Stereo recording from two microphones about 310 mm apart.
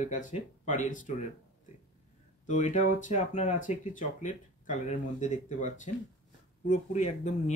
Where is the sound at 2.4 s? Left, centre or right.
Left.